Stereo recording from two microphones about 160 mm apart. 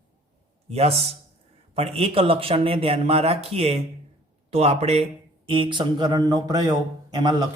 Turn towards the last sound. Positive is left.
turn(degrees=-25)  # may be behind; listen again after turning